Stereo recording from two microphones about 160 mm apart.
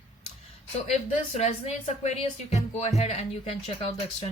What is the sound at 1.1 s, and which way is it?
Speech, 45° left (ahead or behind).